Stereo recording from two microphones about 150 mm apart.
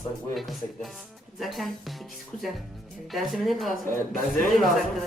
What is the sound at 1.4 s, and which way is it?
Speech, centre (ahead or behind).